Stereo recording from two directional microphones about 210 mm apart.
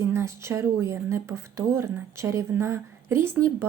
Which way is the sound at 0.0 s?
10° right (ahead or behind).